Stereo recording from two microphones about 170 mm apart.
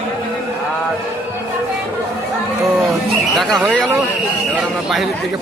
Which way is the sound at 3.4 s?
Centre (ahead or behind).